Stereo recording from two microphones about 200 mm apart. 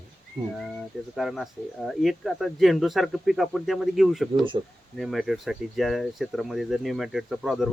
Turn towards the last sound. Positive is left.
turn(degrees=0)  # may be behind; listen again after turning